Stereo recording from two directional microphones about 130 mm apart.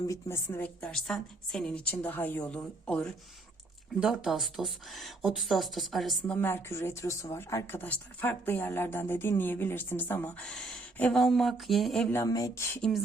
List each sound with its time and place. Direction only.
0.0 s a woman's voice: 25° left (ahead or behind)
0.8 s speech: 5° left (ahead or behind)
4.0 s speech: 5° right (ahead or behind)
12.1 s a woman's voice: 25° left (ahead or behind)